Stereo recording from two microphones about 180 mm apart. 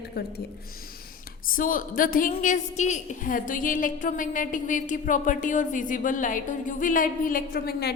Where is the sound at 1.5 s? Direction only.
50° left (ahead or behind).